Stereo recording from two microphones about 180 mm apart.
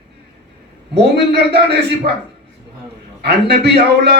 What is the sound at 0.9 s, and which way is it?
Speech, 65° right (ahead or behind).